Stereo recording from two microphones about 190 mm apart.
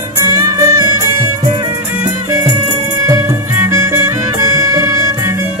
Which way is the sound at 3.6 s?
15° right (ahead or behind).